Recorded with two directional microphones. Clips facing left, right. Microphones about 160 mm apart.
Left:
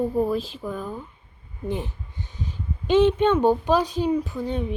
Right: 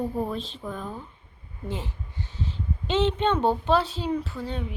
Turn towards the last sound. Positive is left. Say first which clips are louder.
# left 5 dB
turn(degrees=20)  # may be behind; listen again after turning